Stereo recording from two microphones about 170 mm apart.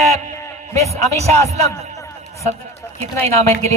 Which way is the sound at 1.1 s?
40° right (ahead or behind).